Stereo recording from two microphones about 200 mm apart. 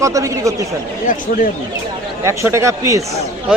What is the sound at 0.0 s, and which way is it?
Speech, 15° right (ahead or behind).